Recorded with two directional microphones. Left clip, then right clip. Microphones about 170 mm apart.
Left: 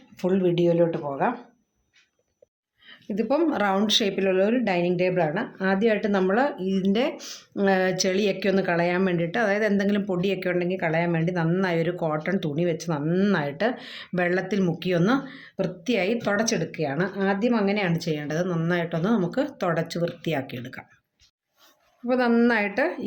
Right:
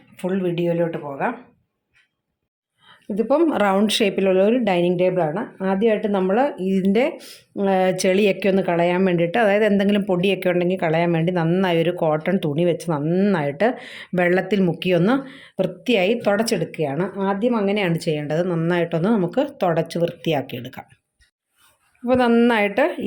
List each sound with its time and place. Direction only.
0.2 s speech: 5° right (ahead or behind)
2.8 s a woman's voice: 35° right (ahead or behind)
7.2 s a woman's voice: 25° right (ahead or behind)
17.7 s a woman's voice: 45° right (ahead or behind)
22.0 s a woman's voice: 35° right (ahead or behind)